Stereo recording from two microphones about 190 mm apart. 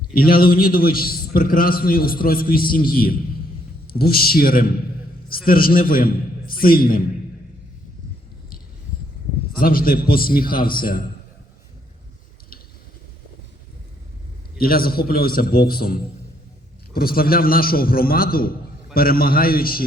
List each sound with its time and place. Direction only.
0.1 s a man's voice: 50° left (ahead or behind)
9.6 s a man's voice: 50° left (ahead or behind)
14.6 s a man's voice: 50° left (ahead or behind)